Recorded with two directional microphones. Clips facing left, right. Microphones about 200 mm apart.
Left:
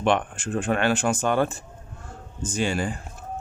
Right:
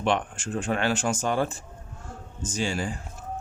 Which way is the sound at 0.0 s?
55° left (ahead or behind).